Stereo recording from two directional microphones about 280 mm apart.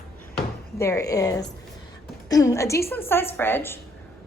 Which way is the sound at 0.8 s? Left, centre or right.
Centre.